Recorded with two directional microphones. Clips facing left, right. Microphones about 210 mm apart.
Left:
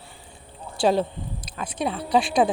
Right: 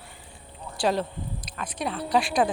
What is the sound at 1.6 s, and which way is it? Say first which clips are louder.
Speech: left 4 dB; 25° left (ahead or behind).